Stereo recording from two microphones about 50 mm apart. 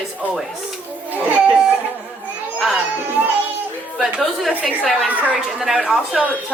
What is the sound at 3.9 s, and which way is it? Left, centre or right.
A woman's voice, centre.